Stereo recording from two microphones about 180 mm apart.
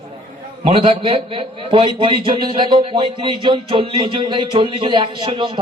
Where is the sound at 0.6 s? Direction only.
30° right (ahead or behind).